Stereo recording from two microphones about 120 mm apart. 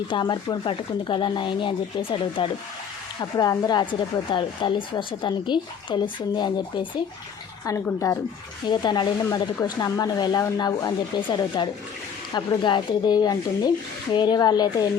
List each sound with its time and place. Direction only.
0.1 s speech: 40° left (ahead or behind)
3.2 s speech: 30° left (ahead or behind)
7.9 s speech: 25° left (ahead or behind)
8.7 s speech: 40° left (ahead or behind)